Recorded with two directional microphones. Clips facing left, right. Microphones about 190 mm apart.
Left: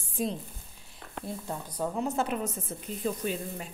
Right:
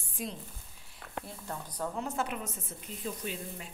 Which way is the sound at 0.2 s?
30° left (ahead or behind).